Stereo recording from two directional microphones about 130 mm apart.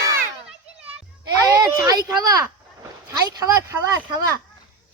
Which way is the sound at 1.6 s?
30° right (ahead or behind).